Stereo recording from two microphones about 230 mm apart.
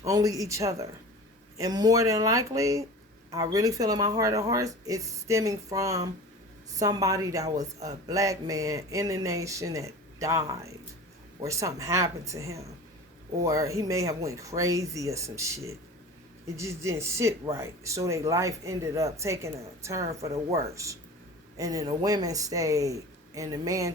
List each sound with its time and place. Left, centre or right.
0.0 s speech: centre
20.2 s speech: right
20.6 s speech: centre